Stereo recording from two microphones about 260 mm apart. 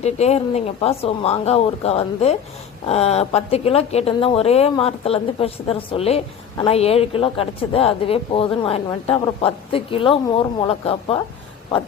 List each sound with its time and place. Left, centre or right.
0.0 s a woman's voice: left